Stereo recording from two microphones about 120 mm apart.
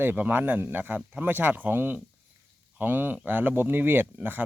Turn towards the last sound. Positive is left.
turn(degrees=-15)  # may be behind; listen again after turning